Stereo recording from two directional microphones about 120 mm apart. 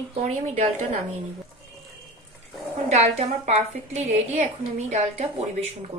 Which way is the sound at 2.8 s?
70° right (ahead or behind).